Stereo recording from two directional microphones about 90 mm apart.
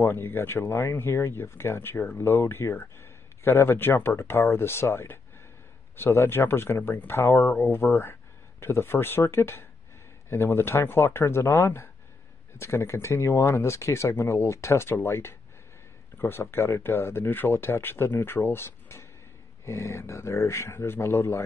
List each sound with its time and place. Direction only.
0.0 s speech: 25° left (ahead or behind)